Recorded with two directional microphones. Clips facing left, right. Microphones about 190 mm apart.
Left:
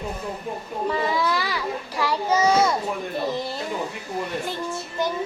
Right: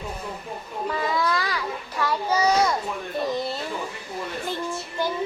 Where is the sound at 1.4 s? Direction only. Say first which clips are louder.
Left 2 dB; 10° left (ahead or behind).